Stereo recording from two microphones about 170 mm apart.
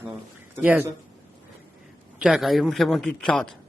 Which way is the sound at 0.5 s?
10° right (ahead or behind).